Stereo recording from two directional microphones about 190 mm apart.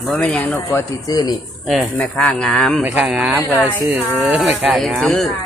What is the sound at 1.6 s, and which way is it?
Speech, centre (ahead or behind).